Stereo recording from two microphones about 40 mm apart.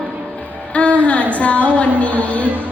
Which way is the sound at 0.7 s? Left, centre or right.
Left.